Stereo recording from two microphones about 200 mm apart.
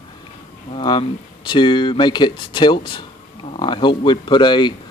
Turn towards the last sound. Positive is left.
turn(degrees=20)  # may be behind; listen again after turning